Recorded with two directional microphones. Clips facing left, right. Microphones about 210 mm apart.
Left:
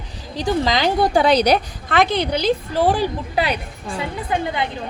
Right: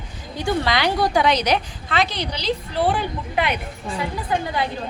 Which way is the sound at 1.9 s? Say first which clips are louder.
Left 6 dB; 55° left (ahead or behind).